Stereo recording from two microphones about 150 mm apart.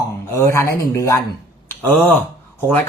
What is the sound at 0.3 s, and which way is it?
Speech, 15° left (ahead or behind).